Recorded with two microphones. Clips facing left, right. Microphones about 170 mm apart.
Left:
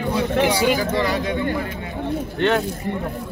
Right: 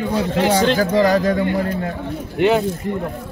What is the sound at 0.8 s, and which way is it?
Speech, 40° right (ahead or behind).